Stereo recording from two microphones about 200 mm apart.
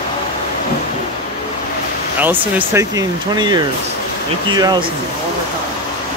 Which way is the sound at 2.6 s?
15° right (ahead or behind).